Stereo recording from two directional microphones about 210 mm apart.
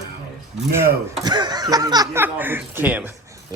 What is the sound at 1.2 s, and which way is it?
Speech, 20° right (ahead or behind).